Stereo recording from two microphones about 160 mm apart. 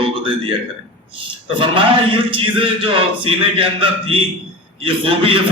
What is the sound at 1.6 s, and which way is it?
Speech, 30° right (ahead or behind).